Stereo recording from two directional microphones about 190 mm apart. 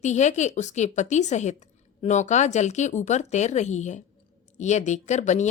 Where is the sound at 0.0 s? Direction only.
40° left (ahead or behind).